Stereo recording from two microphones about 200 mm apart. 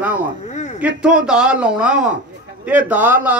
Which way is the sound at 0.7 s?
5° right (ahead or behind).